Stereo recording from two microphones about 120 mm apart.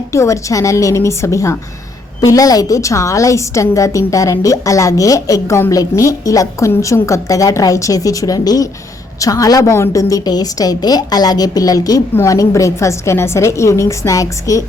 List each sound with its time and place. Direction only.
0.1 s a woman's voice: 25° left (ahead or behind)